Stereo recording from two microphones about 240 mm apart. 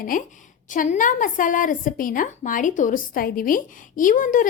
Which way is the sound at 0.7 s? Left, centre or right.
Left.